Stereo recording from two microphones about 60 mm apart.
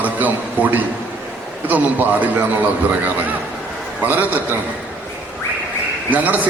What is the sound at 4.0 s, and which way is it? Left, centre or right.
Speech, right.